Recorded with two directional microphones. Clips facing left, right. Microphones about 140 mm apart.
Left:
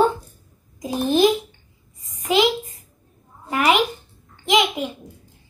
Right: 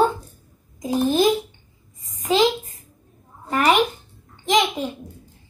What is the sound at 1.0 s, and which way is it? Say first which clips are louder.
A child's voice: left 2 dB; 20° left (ahead or behind).